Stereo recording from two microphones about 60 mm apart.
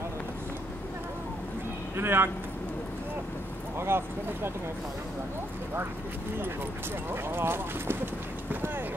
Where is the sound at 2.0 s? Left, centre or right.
Right.